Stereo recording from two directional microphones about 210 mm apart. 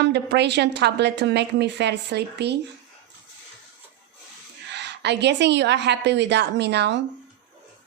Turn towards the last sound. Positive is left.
turn(degrees=-55)  # may be behind; listen again after turning